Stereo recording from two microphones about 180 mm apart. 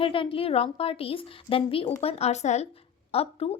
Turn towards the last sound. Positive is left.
turn(degrees=35)  # may be behind; listen again after turning